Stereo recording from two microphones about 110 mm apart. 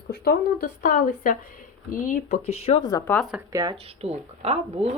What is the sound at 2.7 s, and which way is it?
Speech, 60° left (ahead or behind).